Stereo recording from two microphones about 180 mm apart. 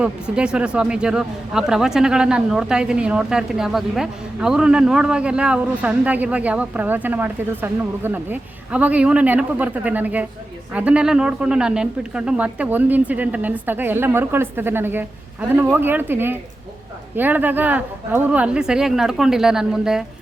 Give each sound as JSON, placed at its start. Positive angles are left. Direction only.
{"t": 0.0, "sound": "speech", "side_deg": -5}